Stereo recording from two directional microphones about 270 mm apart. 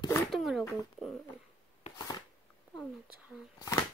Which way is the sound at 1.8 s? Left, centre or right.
Centre.